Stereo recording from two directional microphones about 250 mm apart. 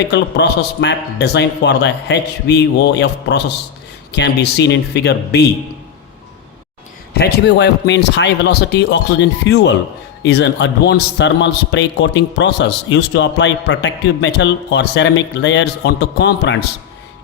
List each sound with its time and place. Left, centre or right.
0.1 s a man's voice: left
7.2 s a man's voice: left